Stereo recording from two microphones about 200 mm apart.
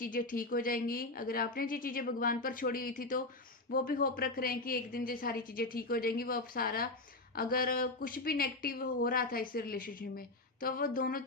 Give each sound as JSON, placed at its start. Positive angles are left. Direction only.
{"t": 0.0, "sound": "speech", "side_deg": 45}